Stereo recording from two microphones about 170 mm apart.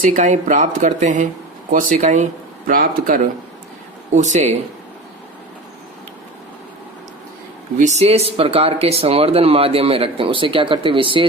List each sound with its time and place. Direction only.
0.0 s speech: 45° right (ahead or behind)
4.1 s speech: 45° right (ahead or behind)
7.8 s speech: 40° right (ahead or behind)